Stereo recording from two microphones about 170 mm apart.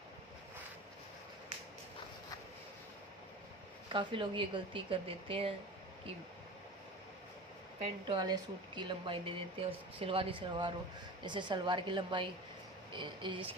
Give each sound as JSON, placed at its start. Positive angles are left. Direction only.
{"t": 3.8, "sound": "a woman's voice", "side_deg": -30}
{"t": 8.0, "sound": "speech", "side_deg": -25}